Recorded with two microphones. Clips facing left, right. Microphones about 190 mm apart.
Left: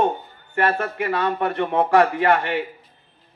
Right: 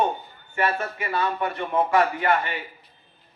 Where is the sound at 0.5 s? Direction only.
60° left (ahead or behind).